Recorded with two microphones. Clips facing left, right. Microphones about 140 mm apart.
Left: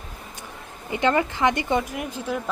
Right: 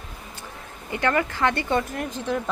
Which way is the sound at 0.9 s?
20° left (ahead or behind).